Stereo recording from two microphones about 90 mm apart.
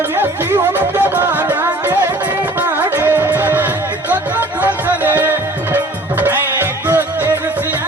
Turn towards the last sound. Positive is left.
turn(degrees=-25)  # may be behind; listen again after turning